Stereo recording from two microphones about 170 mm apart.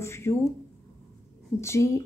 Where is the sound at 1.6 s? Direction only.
15° left (ahead or behind).